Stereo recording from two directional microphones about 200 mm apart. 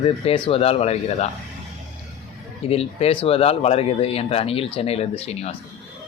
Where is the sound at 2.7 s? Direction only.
30° left (ahead or behind).